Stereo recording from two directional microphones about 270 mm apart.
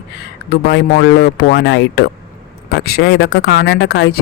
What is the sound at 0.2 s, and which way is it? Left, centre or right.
Speech, left.